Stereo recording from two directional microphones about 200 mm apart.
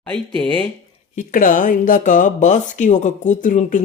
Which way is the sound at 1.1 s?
40° left (ahead or behind).